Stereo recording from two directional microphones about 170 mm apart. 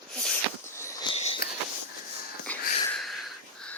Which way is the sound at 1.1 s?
35° left (ahead or behind).